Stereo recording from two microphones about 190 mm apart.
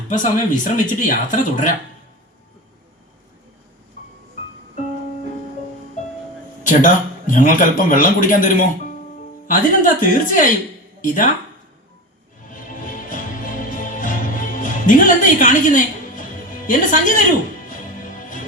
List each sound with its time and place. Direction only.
0.1 s speech: 45° left (ahead or behind)
6.7 s speech: 45° left (ahead or behind)
12.5 s music: 45° left (ahead or behind)
16.6 s speech: 45° left (ahead or behind)
17.7 s music: 45° left (ahead or behind)